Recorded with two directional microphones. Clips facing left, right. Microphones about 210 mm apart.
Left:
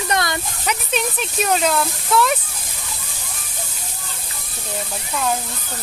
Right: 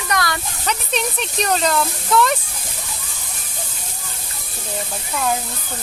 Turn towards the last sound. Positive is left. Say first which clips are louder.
# even
turn(degrees=0)  # may be behind; listen again after turning